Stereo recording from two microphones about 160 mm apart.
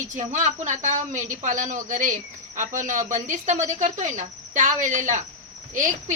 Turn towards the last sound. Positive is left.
turn(degrees=-50)  # may be behind; listen again after turning